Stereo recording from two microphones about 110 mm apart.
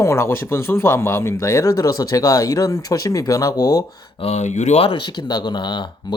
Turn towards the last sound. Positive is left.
turn(degrees=40)  # may be behind; listen again after turning